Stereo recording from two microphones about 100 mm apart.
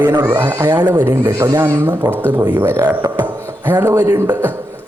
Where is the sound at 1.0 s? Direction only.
30° right (ahead or behind).